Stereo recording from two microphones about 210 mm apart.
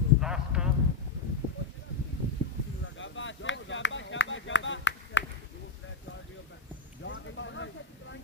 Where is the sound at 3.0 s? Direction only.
65° left (ahead or behind).